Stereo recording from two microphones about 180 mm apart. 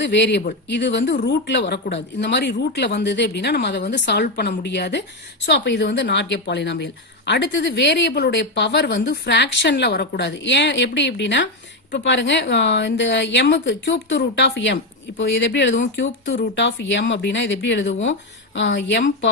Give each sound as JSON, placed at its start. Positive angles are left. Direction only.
{"t": 0.0, "sound": "a woman's voice", "side_deg": 75}